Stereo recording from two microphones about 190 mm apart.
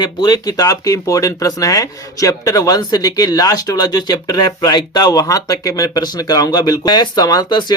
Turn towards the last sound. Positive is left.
turn(degrees=20)  # may be behind; listen again after turning